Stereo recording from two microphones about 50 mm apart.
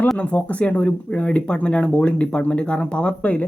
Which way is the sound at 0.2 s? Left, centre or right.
Left.